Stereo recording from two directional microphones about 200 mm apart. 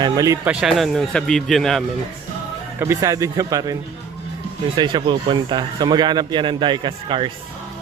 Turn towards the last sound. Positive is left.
turn(degrees=-25)  # may be behind; listen again after turning